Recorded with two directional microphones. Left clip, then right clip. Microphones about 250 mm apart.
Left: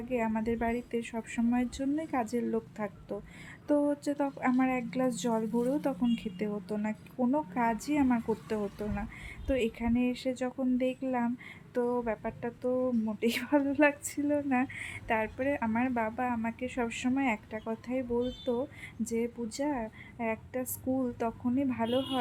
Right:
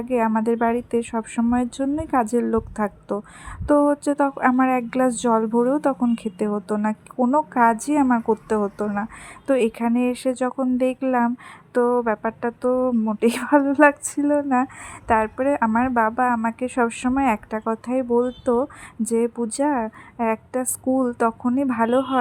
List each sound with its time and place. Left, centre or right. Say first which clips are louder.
0.1 s speech: right 11 dB; centre